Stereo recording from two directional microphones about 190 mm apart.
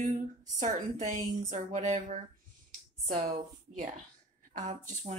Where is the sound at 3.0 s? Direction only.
45° right (ahead or behind).